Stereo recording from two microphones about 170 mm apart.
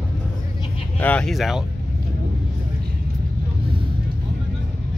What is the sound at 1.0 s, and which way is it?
Speech, 10° left (ahead or behind).